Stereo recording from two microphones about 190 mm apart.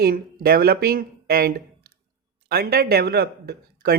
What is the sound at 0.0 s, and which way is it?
A man's voice, 50° right (ahead or behind).